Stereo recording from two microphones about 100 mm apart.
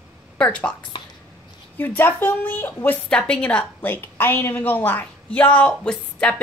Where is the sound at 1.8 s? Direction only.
20° left (ahead or behind).